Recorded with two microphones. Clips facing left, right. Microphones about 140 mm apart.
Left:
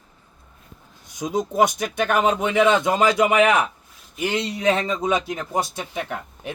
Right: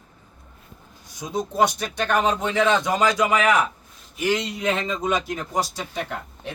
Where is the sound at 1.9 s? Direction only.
50° left (ahead or behind).